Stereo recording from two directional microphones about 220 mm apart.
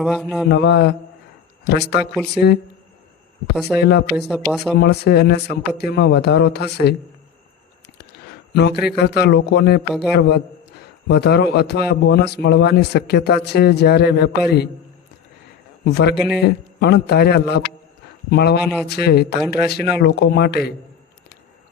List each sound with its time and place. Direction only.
0.0 s speech: centre (ahead or behind)
0.4 s a man's voice: 50° left (ahead or behind)
2.1 s speech: centre (ahead or behind)
3.8 s a man's voice: 50° left (ahead or behind)
4.1 s speech: centre (ahead or behind)
4.8 s a man's voice: 45° left (ahead or behind)
8.5 s a man's voice: 50° left (ahead or behind)
15.8 s a man's voice: 45° left (ahead or behind)